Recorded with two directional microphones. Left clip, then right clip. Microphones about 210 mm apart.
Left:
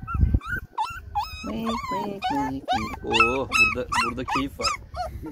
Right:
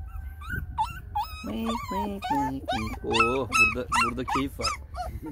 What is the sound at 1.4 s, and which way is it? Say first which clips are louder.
Speech: left 3 dB; 5° left (ahead or behind).